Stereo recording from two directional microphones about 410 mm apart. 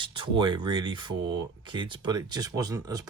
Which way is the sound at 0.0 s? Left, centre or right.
Centre.